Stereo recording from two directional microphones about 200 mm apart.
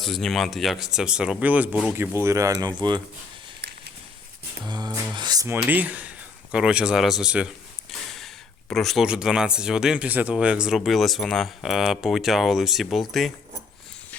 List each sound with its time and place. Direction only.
0.0 s speech: centre (ahead or behind); by 2.7 s 15° right (ahead or behind)
4.6 s a sound: 20° right (ahead or behind); by 7.4 s 5° right (ahead or behind)
8.7 s speech: centre (ahead or behind)